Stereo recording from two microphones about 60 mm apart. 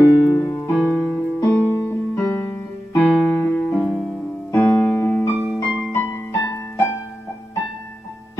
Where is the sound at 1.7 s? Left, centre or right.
Left.